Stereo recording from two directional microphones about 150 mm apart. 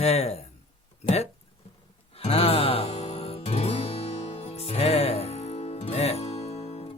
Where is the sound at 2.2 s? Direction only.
40° left (ahead or behind).